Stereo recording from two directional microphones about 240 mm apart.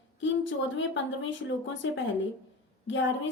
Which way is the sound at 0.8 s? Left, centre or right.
Left.